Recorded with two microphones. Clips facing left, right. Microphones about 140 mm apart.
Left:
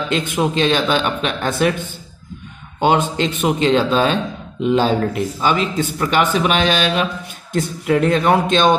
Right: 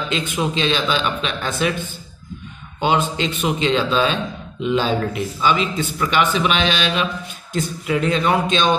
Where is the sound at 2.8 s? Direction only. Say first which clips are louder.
Left 3 dB; 50° left (ahead or behind).